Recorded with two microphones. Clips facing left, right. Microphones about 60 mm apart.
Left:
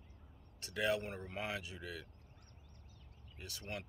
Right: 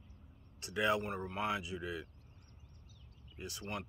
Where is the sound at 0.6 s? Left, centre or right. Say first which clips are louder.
Right 3 dB; centre.